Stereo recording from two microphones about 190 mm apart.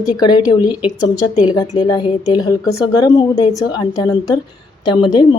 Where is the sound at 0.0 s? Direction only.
20° left (ahead or behind).